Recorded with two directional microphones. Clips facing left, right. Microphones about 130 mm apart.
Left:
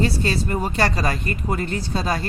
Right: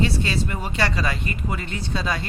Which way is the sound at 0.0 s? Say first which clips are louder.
Left 1 dB; 40° left (ahead or behind).